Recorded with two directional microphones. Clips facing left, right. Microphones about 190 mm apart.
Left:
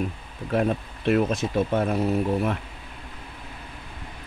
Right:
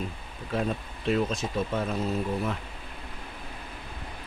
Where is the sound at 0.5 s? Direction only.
60° left (ahead or behind).